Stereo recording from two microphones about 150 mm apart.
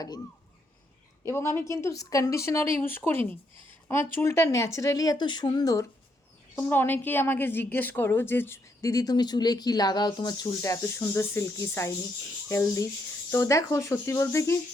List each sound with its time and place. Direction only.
1.2 s a woman's voice: 15° left (ahead or behind)
6.6 s a woman's voice: 15° left (ahead or behind)